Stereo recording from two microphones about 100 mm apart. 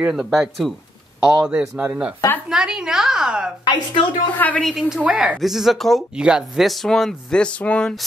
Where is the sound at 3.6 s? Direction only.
55° left (ahead or behind).